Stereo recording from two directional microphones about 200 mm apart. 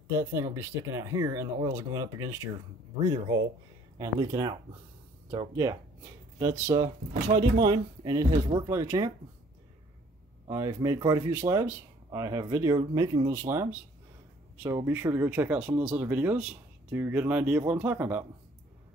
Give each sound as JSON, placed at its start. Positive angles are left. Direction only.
{"t": 0.1, "sound": "speech", "side_deg": -15}
{"t": 10.5, "sound": "speech", "side_deg": -15}